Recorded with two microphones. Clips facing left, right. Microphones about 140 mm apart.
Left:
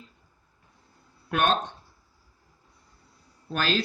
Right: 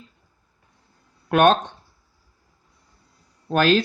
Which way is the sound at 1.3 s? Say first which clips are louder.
Right 8 dB; 65° right (ahead or behind).